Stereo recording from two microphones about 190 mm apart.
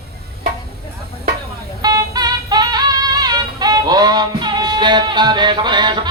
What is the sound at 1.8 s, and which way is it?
Music, 20° right (ahead or behind).